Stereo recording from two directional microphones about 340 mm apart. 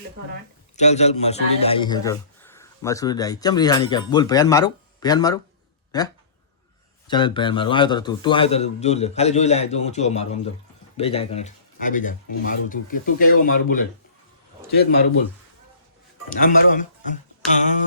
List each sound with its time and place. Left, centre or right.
0.8 s speech: centre
7.1 s speech: centre
16.3 s speech: left